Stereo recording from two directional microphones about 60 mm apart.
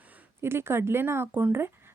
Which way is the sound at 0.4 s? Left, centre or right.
Right.